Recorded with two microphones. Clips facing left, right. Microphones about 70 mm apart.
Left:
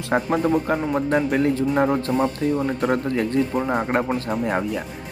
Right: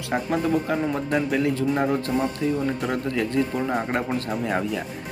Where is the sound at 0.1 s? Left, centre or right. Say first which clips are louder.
Left 5 dB; left.